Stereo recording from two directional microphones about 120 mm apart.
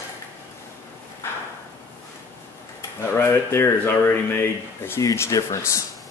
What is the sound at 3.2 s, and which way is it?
Speech, 20° left (ahead or behind).